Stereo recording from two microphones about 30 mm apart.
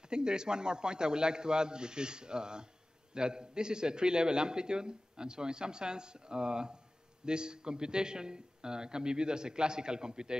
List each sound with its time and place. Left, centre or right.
0.1 s a man's voice: right